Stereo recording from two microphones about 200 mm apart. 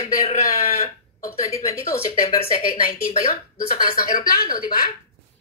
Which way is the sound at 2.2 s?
30° left (ahead or behind).